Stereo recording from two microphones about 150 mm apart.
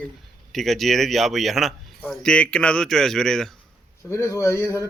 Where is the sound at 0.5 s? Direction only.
Centre (ahead or behind).